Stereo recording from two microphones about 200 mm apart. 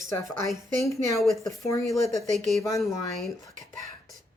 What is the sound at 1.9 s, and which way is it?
Speech, centre (ahead or behind).